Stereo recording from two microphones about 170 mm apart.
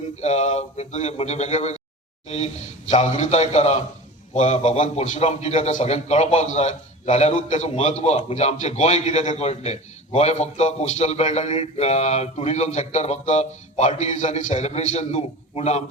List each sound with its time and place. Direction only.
0.2 s a man's voice: 40° left (ahead or behind)